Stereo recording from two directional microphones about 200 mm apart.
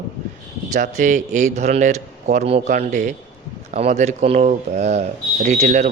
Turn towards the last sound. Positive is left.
turn(degrees=-35)  # may be behind; listen again after turning